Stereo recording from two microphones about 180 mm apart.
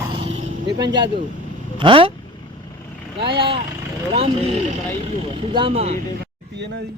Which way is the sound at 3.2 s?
25° right (ahead or behind).